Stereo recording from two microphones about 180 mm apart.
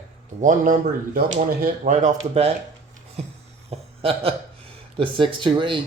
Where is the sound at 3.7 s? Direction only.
30° right (ahead or behind).